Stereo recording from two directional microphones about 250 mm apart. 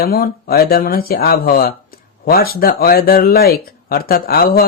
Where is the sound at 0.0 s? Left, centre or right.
Left.